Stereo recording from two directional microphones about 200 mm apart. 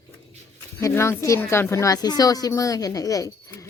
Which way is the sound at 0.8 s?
15° left (ahead or behind).